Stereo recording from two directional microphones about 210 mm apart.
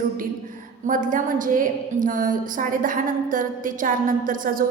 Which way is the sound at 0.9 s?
40° right (ahead or behind).